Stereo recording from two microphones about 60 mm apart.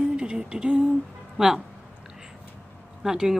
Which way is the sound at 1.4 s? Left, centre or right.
Centre.